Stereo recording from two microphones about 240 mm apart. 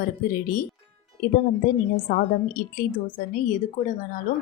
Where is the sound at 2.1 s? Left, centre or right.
Left.